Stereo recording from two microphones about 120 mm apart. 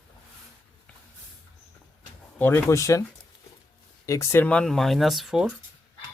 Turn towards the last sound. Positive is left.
turn(degrees=0)  # may be behind; listen again after turning